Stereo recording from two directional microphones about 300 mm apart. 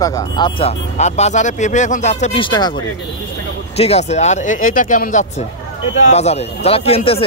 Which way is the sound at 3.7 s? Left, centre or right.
Left.